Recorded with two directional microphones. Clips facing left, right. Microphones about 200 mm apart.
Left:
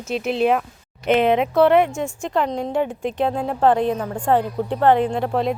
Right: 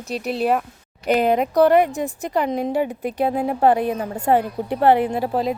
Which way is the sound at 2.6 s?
5° right (ahead or behind).